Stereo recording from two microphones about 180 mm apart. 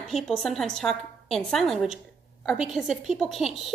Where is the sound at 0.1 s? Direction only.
Centre (ahead or behind).